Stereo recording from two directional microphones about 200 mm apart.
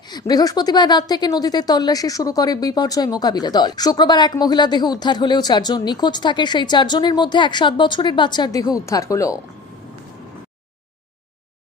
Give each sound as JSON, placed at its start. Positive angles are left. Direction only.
{"t": 0.1, "sound": "a woman's voice", "side_deg": 20}